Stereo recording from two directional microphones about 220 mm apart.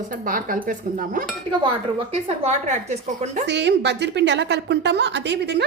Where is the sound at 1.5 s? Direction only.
20° right (ahead or behind).